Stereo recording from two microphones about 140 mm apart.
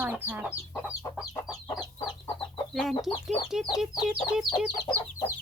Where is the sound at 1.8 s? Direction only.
35° left (ahead or behind).